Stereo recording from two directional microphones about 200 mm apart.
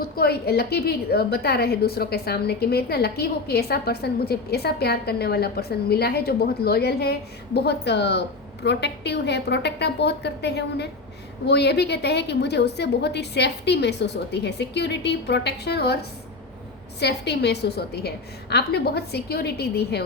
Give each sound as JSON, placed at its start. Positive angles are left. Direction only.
{"t": 0.0, "sound": "a woman's voice", "side_deg": 50}
{"t": 17.0, "sound": "a woman's voice", "side_deg": 55}